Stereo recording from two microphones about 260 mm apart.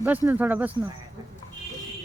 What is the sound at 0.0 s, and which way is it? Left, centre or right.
Speech, centre.